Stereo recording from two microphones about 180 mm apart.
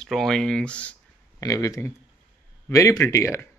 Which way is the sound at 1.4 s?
15° left (ahead or behind).